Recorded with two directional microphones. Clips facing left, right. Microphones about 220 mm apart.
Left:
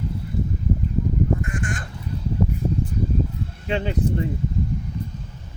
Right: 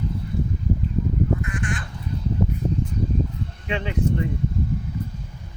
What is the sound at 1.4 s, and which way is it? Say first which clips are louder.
Crow: even; 45° left (ahead or behind).